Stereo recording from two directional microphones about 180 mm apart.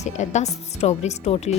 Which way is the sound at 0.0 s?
40° left (ahead or behind).